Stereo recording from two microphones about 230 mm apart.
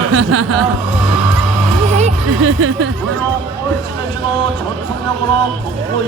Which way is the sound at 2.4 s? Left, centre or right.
Right.